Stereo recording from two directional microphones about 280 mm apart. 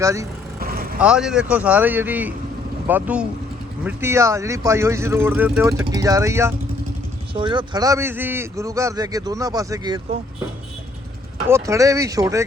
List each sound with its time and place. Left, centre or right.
0.0 s a man's voice: centre
0.6 s vehicle: right
0.9 s a man's voice: centre
11.4 s a man's voice: centre